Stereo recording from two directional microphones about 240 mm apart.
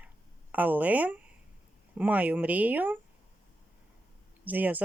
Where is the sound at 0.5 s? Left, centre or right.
Centre.